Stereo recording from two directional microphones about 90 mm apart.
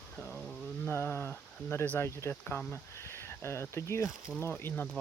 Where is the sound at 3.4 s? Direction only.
30° left (ahead or behind).